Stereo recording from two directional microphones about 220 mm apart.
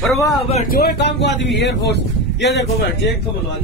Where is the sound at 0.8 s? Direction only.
50° left (ahead or behind).